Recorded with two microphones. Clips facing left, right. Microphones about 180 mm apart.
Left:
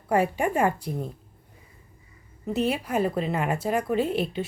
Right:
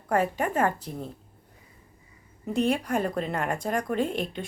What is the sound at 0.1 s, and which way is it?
Speech, 10° left (ahead or behind).